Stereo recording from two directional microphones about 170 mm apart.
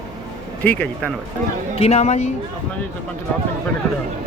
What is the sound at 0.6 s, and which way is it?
Speech, 5° left (ahead or behind).